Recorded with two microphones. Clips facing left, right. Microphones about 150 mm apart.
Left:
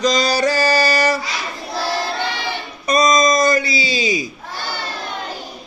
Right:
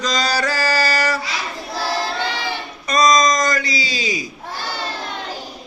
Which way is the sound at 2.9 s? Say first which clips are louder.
Left 1 dB; 10° left (ahead or behind).